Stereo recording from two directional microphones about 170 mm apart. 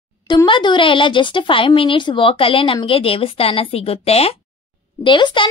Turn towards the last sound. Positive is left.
turn(degrees=30)  # may be behind; listen again after turning